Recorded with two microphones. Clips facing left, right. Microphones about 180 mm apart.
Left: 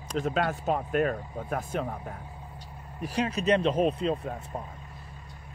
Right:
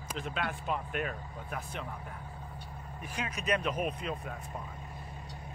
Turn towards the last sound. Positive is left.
turn(degrees=30)  # may be behind; listen again after turning